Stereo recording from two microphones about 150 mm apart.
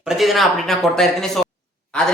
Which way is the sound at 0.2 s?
Centre (ahead or behind).